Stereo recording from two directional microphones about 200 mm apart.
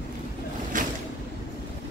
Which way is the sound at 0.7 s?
40° right (ahead or behind).